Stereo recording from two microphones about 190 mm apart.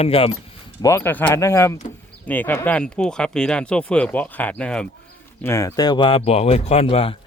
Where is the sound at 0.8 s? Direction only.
15° left (ahead or behind); by 7.1 s 30° left (ahead or behind).